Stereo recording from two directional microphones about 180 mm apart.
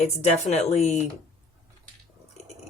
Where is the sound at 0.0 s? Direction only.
35° left (ahead or behind).